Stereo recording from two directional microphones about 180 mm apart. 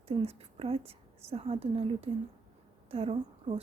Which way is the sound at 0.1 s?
30° right (ahead or behind).